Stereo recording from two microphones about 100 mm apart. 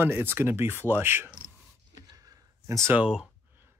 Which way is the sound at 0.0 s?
20° right (ahead or behind).